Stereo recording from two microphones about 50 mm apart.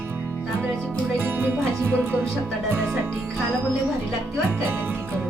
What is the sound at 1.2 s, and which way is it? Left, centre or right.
Music, right.